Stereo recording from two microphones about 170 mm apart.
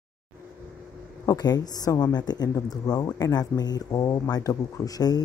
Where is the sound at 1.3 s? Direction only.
20° left (ahead or behind).